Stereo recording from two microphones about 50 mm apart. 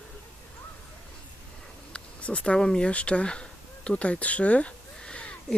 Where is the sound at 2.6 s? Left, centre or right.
Centre.